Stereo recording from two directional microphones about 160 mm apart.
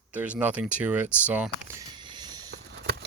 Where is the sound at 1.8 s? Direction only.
30° right (ahead or behind).